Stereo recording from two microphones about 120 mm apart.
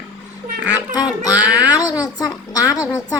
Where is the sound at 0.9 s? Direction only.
30° left (ahead or behind).